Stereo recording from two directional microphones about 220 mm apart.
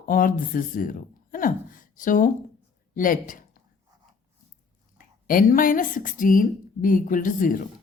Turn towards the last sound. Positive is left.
turn(degrees=40)  # may be behind; listen again after turning